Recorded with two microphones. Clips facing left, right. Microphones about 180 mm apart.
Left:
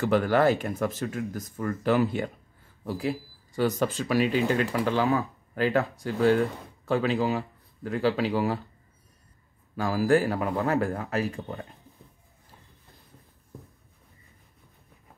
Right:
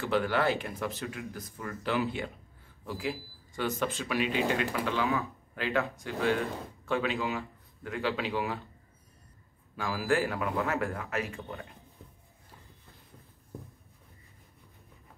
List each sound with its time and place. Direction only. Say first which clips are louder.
0.0 s a man's voice: left 6 dB; 45° left (ahead or behind)
9.8 s speech: left 6 dB; 40° left (ahead or behind)